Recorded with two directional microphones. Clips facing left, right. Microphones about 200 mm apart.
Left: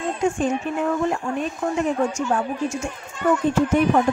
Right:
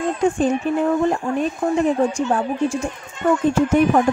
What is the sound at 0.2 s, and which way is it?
Speech, 35° right (ahead or behind).